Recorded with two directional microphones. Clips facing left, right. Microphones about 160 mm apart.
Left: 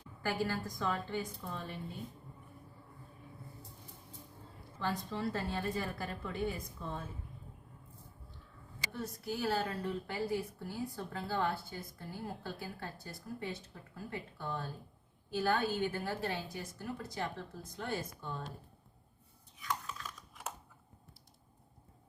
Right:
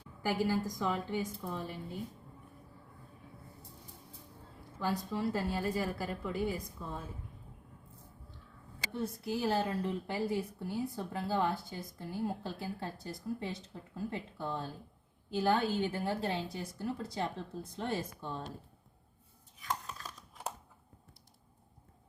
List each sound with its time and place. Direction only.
0.2 s a woman's voice: 15° right (ahead or behind)
4.8 s a woman's voice: 10° right (ahead or behind)
8.9 s a woman's voice: 25° right (ahead or behind)
13.9 s a woman's voice: 20° right (ahead or behind)
19.6 s a sound: 35° right (ahead or behind)